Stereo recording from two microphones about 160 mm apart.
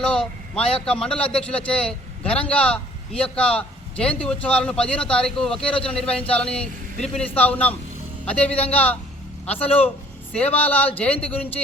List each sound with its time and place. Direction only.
0.0 s a man's voice: 5° left (ahead or behind)
5.5 s a man's voice: 35° left (ahead or behind)
5.8 s a man's voice: 5° left (ahead or behind)
9.6 s a man's voice: 35° left (ahead or behind)
10.6 s a man's voice: 10° left (ahead or behind)